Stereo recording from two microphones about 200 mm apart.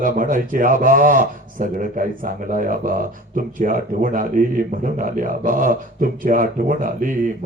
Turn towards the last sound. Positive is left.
turn(degrees=-40)  # may be behind; listen again after turning